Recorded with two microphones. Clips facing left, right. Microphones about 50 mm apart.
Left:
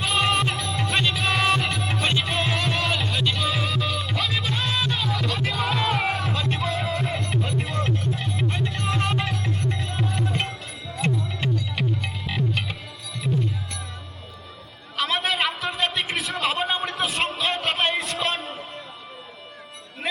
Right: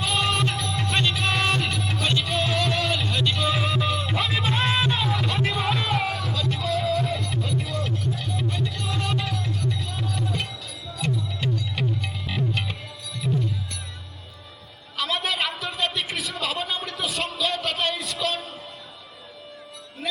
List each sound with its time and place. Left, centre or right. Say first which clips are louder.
0.0 s music: left 2 dB; centre
1.7 s music: left 1 dB; centre
4.6 s music: right 4 dB; right
4.9 s music: right 1 dB; centre
6.1 s a sound: left 2 dB; left
6.7 s music: right 3 dB; centre
7.1 s music: left 1 dB; left
9.4 s music: left 1 dB; left
10.9 s music: left 2 dB; left
11.8 s music: left 1 dB; centre
14.9 s a sound: left 2 dB; centre
17.1 s music: left 2 dB; left